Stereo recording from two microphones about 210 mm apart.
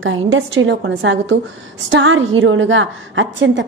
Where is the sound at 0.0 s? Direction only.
65° right (ahead or behind).